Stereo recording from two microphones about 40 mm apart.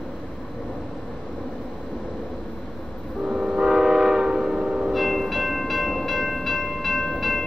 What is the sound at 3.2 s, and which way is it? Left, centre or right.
Train, right.